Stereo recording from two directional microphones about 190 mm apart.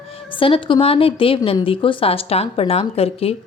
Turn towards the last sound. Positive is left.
turn(degrees=30)  # may be behind; listen again after turning